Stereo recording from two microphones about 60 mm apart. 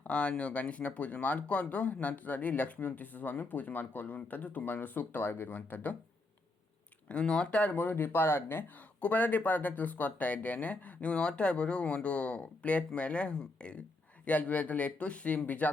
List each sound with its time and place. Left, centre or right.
0.0 s speech: centre
7.1 s speech: centre